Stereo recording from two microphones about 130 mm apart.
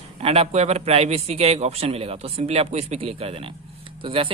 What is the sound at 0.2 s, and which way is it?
A man's voice, 50° right (ahead or behind).